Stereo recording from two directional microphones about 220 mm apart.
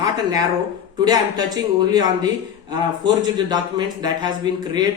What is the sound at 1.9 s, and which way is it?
A man's voice, 20° right (ahead or behind).